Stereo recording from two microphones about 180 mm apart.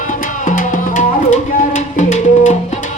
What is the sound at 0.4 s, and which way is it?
Music, 45° left (ahead or behind).